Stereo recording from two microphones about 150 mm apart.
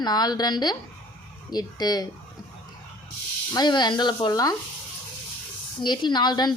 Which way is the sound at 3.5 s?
30° left (ahead or behind).